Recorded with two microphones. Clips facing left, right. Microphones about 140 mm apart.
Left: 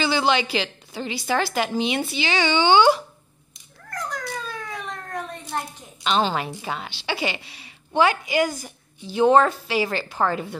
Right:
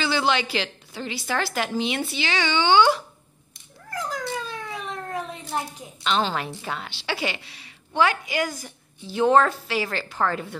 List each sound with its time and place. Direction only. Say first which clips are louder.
0.0 s a woman's voice: left 2 dB; 10° left (ahead or behind)
3.9 s a sound: right 2 dB; 5° right (ahead or behind)
6.0 s a woman's voice: left 2 dB; 10° left (ahead or behind)